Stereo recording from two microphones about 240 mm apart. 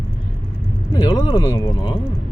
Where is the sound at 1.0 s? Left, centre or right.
Centre.